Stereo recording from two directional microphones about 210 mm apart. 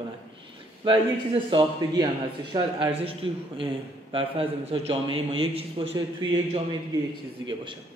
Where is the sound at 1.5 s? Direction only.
20° right (ahead or behind).